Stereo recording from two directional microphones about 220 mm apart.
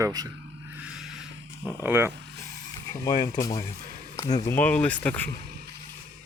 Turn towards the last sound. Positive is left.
turn(degrees=5)  # may be behind; listen again after turning